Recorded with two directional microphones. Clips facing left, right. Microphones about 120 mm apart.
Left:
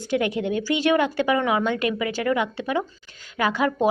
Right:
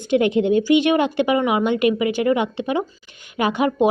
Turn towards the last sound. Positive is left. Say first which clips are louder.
# right 3 dB
turn(degrees=-20)  # may be behind; listen again after turning